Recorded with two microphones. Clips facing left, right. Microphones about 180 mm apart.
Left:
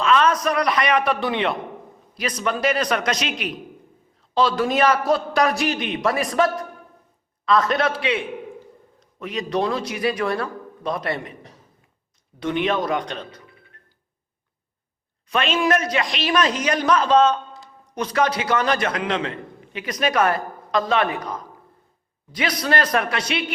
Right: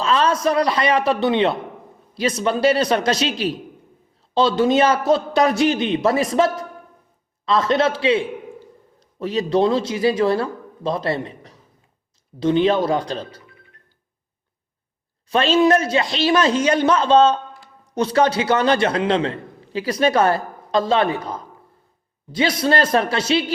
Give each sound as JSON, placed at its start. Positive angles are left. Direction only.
{"t": 0.0, "sound": "a man's voice", "side_deg": -30}
{"t": 12.4, "sound": "a man's voice", "side_deg": -30}
{"t": 15.3, "sound": "a man's voice", "side_deg": -30}